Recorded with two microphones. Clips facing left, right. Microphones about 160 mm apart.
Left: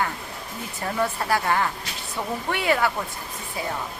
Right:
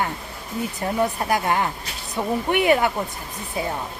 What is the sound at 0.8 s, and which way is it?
Speech, 20° right (ahead or behind).